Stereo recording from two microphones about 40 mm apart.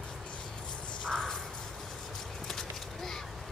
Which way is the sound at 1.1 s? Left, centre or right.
Centre.